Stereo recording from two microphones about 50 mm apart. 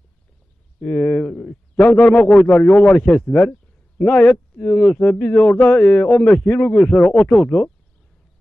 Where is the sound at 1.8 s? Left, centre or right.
Left.